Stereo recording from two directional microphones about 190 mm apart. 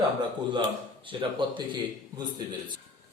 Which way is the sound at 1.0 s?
25° right (ahead or behind).